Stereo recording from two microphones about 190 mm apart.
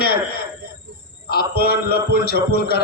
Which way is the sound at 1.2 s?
55° left (ahead or behind).